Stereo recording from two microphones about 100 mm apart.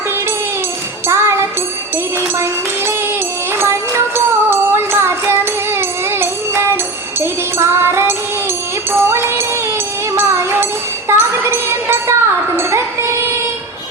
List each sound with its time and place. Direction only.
1.0 s music: 25° right (ahead or behind)
3.6 s music: 25° right (ahead or behind)
12.5 s a sound: 25° right (ahead or behind)